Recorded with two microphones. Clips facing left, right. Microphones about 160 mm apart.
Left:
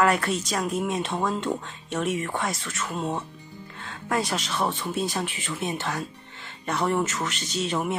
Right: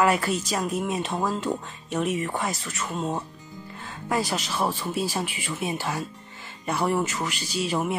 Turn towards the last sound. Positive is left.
turn(degrees=-5)  # may be behind; listen again after turning